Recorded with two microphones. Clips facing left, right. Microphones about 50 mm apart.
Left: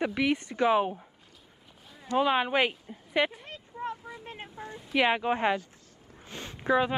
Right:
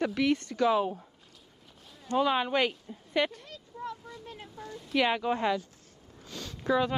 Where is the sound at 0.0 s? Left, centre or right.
Centre.